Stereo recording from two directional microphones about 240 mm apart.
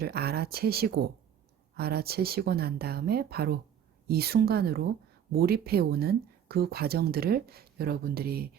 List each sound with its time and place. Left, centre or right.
0.0 s speech: right